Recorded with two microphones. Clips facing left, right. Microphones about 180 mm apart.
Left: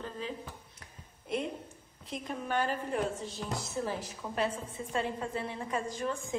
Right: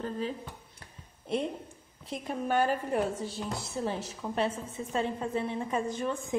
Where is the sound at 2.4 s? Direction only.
45° right (ahead or behind).